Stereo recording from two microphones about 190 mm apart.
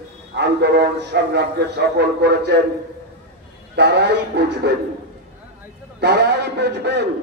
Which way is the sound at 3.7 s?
60° right (ahead or behind).